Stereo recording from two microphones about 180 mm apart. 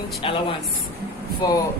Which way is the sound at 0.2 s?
30° left (ahead or behind).